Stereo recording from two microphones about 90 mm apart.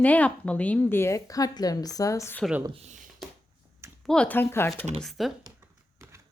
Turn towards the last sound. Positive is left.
turn(degrees=-30)  # may be behind; listen again after turning